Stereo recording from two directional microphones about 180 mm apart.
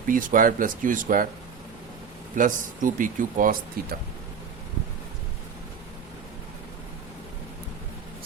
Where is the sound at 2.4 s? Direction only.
45° right (ahead or behind).